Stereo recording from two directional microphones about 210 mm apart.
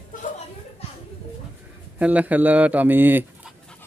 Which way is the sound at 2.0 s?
5° right (ahead or behind).